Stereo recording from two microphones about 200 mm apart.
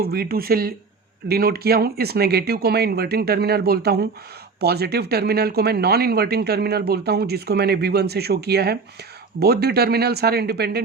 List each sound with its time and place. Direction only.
0.0 s speech: 50° right (ahead or behind)